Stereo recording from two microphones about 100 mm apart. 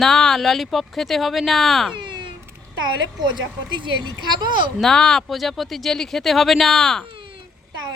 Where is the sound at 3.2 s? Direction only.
50° right (ahead or behind).